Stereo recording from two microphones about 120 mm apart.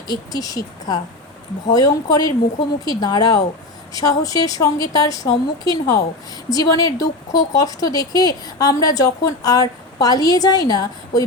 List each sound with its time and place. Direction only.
0.1 s a woman's voice: 30° left (ahead or behind)